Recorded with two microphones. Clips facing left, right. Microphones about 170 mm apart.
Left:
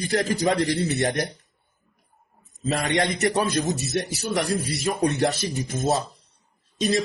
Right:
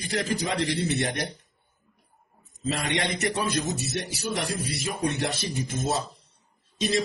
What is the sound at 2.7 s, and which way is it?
Speech, 45° left (ahead or behind).